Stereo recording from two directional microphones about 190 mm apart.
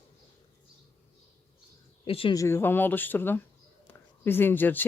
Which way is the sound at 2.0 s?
30° left (ahead or behind).